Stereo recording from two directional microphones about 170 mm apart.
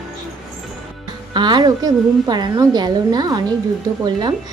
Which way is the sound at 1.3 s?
25° right (ahead or behind).